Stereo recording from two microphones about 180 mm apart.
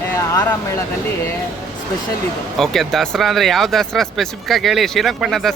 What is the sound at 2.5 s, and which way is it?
Speech, centre (ahead or behind).